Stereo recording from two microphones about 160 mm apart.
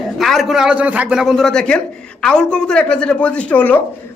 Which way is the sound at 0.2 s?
Centre (ahead or behind).